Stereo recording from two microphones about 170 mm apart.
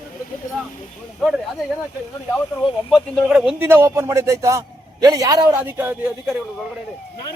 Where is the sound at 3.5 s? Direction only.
15° right (ahead or behind).